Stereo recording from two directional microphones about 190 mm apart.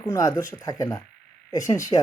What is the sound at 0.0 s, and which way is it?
Speech, 20° left (ahead or behind).